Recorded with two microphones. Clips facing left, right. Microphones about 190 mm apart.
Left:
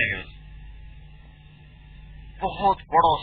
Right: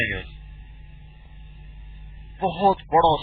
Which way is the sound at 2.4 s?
30° right (ahead or behind).